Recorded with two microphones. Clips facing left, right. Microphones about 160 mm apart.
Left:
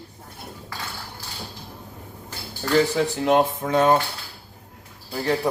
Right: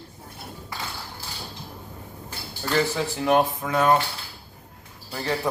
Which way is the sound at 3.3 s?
25° left (ahead or behind).